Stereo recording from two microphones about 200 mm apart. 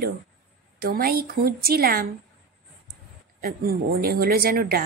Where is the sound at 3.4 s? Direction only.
45° right (ahead or behind).